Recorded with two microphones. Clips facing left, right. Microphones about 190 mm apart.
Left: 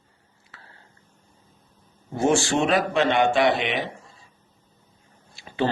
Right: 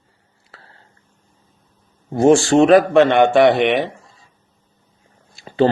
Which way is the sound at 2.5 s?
50° right (ahead or behind).